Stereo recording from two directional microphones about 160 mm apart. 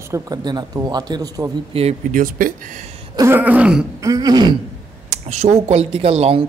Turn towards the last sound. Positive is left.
turn(degrees=-40)  # may be behind; listen again after turning